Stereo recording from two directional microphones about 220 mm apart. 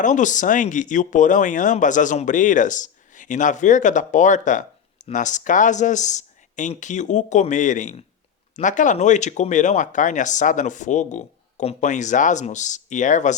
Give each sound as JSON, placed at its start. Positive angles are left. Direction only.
{"t": 0.0, "sound": "speech", "side_deg": 35}